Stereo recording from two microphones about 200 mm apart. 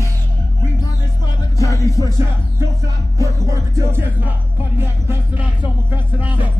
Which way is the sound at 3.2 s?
15° right (ahead or behind).